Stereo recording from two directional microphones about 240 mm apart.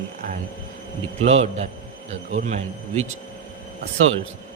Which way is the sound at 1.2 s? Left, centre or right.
Right.